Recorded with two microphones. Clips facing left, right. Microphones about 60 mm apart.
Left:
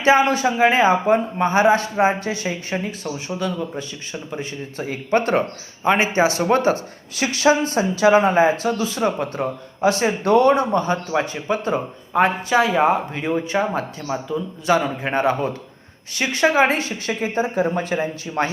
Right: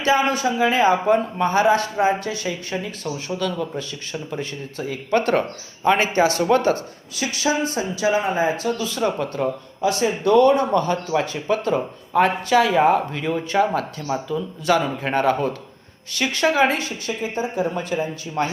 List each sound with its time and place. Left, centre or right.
0.0 s speech: left
0.4 s speech: left
0.8 s speech: left
3.2 s speech: centre
7.2 s speech: left
9.0 s speech: left
10.0 s speech: left; by 13.0 s centre
13.1 s speech: left